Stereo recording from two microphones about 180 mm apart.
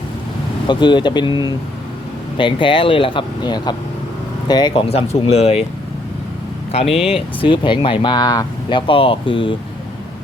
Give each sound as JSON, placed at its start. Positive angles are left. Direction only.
{"t": 0.7, "sound": "speech", "side_deg": 25}
{"t": 6.9, "sound": "speech", "side_deg": 30}